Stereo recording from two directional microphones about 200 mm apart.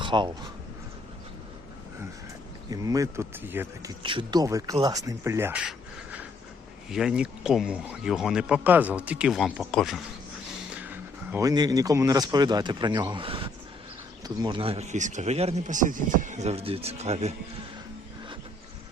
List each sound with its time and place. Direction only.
0.0 s speech: 25° right (ahead or behind)
2.6 s speech: 15° right (ahead or behind)
4.0 s speech: 25° right (ahead or behind)